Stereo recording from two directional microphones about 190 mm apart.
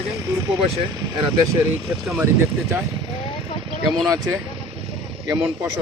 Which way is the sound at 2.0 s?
10° right (ahead or behind).